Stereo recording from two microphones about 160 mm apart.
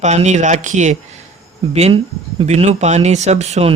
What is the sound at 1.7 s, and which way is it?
Speech, 35° right (ahead or behind).